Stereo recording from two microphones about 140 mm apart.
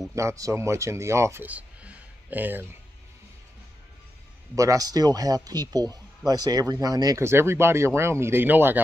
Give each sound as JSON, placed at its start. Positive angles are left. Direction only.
{"t": 0.1, "sound": "speech", "side_deg": -20}
{"t": 4.6, "sound": "speech", "side_deg": -25}